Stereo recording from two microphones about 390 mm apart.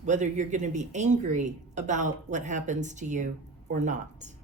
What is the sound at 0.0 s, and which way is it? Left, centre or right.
A woman's voice, centre.